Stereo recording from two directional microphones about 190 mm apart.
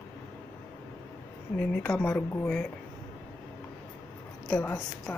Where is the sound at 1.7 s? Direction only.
5° left (ahead or behind).